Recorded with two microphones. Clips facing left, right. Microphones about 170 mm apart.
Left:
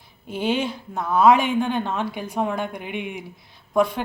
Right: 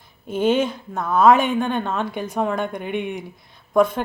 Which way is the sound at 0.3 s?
50° right (ahead or behind).